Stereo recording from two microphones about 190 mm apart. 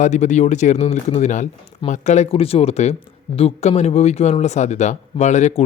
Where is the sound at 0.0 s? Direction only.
40° left (ahead or behind).